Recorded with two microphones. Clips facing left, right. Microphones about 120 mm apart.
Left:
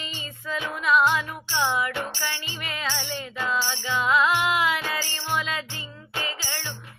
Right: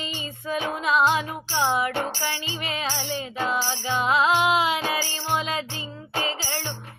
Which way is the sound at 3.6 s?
35° right (ahead or behind).